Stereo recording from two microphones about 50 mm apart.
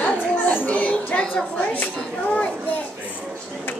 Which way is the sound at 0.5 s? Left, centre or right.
Left.